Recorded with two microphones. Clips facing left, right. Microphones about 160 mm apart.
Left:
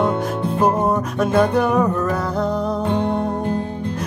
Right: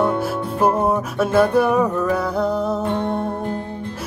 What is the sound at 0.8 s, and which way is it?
Music, 5° right (ahead or behind).